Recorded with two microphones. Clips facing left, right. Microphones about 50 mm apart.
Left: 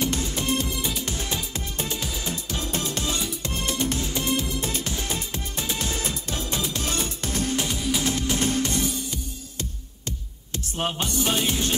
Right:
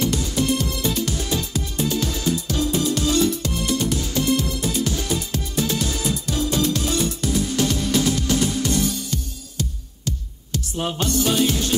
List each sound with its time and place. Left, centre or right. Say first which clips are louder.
0.1 s music: right 4 dB; left; by 1.0 s centre
1.0 s music: right 5 dB; left
7.7 s music: right 5 dB; centre
8.0 s music: right 4 dB; left
10.9 s music: right 5 dB; centre